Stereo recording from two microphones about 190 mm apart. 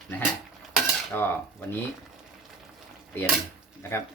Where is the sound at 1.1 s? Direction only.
10° left (ahead or behind).